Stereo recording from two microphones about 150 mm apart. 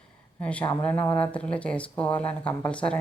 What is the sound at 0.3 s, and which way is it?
Speech, 10° left (ahead or behind).